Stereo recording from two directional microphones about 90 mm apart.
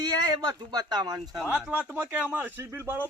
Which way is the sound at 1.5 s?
15° right (ahead or behind).